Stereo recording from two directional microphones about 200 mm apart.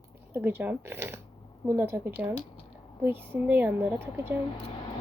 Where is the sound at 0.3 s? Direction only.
10° right (ahead or behind).